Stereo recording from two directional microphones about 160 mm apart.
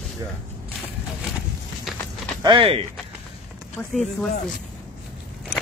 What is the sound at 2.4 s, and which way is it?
Speech, 30° right (ahead or behind).